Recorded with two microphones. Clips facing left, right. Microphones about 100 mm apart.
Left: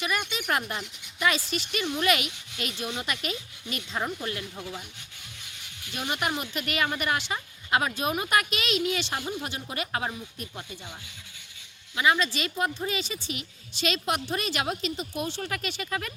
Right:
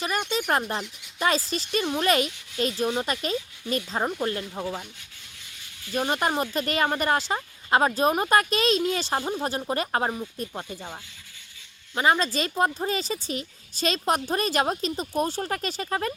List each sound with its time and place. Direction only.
0.0 s speech: 40° right (ahead or behind)
5.9 s speech: 40° right (ahead or behind)
11.9 s speech: 40° right (ahead or behind)